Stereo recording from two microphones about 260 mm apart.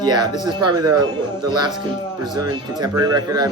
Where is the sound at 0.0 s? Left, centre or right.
Centre.